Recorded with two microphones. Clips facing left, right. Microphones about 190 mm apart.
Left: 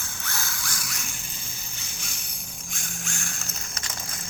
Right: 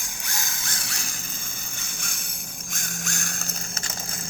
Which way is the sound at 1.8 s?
50° right (ahead or behind).